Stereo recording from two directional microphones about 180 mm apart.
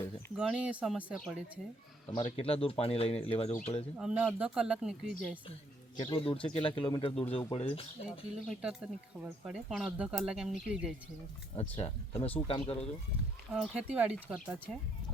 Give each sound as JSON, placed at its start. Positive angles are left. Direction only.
{"t": 0.3, "sound": "speech", "side_deg": -5}
{"t": 2.0, "sound": "speech", "side_deg": 35}
{"t": 3.9, "sound": "speech", "side_deg": -5}
{"t": 6.0, "sound": "speech", "side_deg": 30}
{"t": 8.4, "sound": "speech", "side_deg": -5}
{"t": 11.8, "sound": "speech", "side_deg": 30}
{"t": 13.5, "sound": "speech", "side_deg": -5}